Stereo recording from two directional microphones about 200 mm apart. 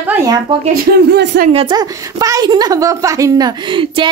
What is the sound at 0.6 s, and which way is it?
Speech, 50° right (ahead or behind).